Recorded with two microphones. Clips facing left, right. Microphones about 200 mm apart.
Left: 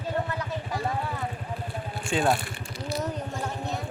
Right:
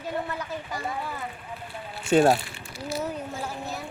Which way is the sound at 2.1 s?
45° right (ahead or behind).